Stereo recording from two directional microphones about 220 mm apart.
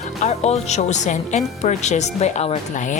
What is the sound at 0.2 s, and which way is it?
Speech, 30° left (ahead or behind).